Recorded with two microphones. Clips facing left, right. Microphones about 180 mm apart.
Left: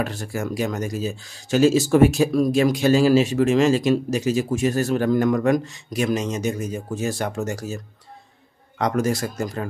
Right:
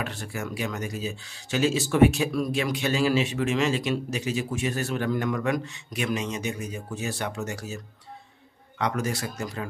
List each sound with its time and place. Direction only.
0.0 s speech: 40° left (ahead or behind)